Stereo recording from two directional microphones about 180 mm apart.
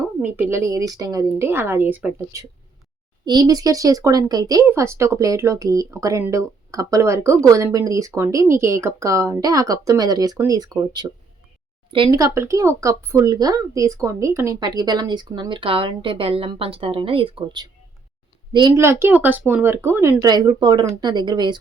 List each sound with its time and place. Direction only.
0.2 s speech: 10° right (ahead or behind)